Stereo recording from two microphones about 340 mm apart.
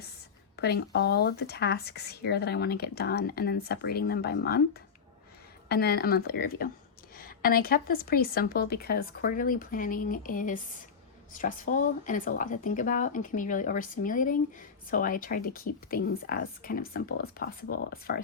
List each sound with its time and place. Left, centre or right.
0.5 s speech: left